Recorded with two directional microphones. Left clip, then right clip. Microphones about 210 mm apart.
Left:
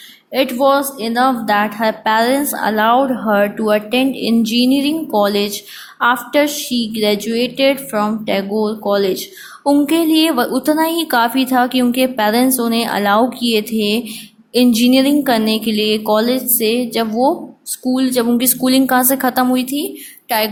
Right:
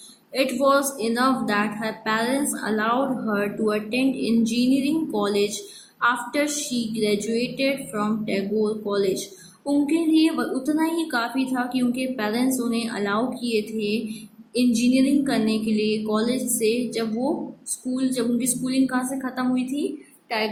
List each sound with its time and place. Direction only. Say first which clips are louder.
0.3 s a woman's voice: left 6 dB; 35° left (ahead or behind)